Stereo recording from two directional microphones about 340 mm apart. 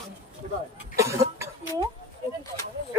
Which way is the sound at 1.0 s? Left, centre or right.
Centre.